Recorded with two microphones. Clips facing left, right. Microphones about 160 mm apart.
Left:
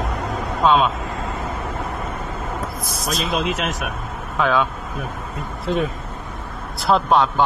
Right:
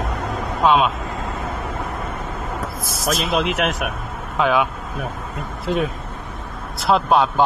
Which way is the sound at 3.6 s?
70° right (ahead or behind).